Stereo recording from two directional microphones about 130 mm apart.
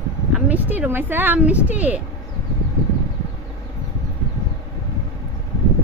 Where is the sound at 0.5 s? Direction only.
15° right (ahead or behind).